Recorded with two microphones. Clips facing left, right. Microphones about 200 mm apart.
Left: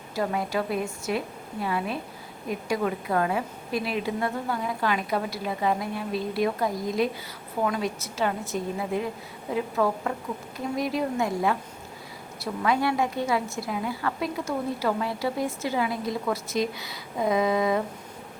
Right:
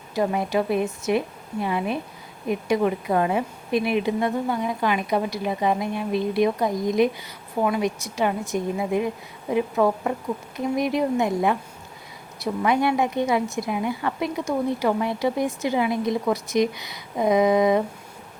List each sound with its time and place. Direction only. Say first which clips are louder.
0.1 s a woman's voice: right 4 dB; 20° right (ahead or behind)